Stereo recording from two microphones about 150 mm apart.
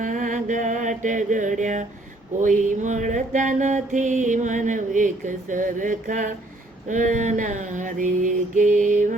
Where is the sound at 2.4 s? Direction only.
60° right (ahead or behind).